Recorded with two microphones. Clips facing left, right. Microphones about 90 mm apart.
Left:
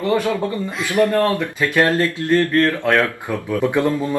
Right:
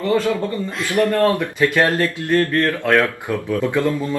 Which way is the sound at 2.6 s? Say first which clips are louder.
Even; 15° left (ahead or behind).